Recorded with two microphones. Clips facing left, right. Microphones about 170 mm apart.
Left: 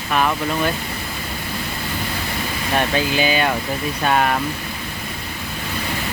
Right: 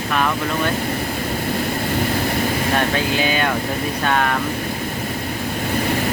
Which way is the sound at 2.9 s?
5° left (ahead or behind).